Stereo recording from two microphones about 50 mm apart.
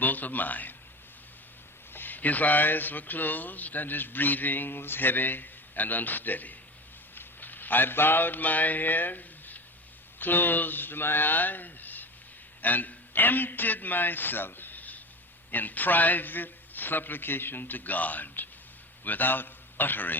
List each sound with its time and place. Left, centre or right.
0.0 s a man's voice: left
1.9 s speech: left
7.2 s mantra: left
10.2 s a man's voice: left